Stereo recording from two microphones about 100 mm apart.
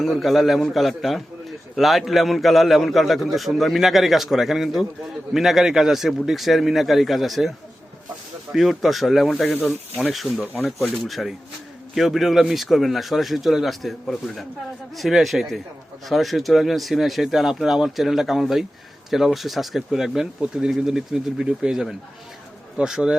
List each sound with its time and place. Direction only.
0.0 s a man's voice: centre (ahead or behind)
8.5 s a man's voice: centre (ahead or behind)
9.5 s speech: 15° left (ahead or behind)
10.0 s a man's voice: centre (ahead or behind)